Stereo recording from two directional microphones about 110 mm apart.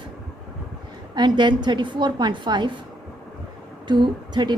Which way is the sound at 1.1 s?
45° right (ahead or behind).